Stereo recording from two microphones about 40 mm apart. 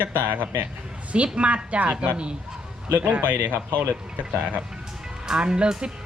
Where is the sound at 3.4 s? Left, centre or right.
Right.